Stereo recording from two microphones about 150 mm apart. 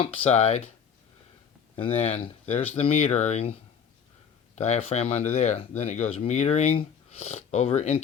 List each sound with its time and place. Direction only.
0.0 s speech: 40° left (ahead or behind)
1.7 s speech: 40° left (ahead or behind)
4.5 s speech: 50° left (ahead or behind)